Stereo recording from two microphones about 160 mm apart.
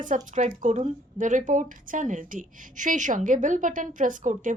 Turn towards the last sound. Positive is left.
turn(degrees=-55)  # may be behind; listen again after turning